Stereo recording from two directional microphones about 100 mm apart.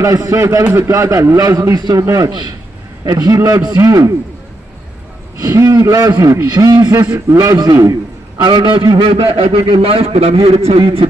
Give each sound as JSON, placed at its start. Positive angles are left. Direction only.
{"t": 0.0, "sound": "a man's voice", "side_deg": -35}
{"t": 5.4, "sound": "a man's voice", "side_deg": -35}
{"t": 8.5, "sound": "a man's voice", "side_deg": -50}
{"t": 9.1, "sound": "a man's voice", "side_deg": -75}